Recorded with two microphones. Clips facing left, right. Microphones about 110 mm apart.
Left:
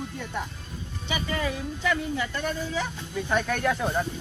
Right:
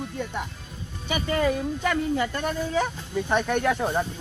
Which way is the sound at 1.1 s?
50° right (ahead or behind).